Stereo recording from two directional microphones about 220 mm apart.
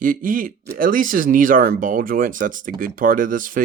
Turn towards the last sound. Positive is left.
turn(degrees=-40)  # may be behind; listen again after turning